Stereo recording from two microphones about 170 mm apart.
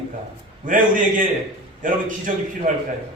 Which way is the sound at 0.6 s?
50° right (ahead or behind).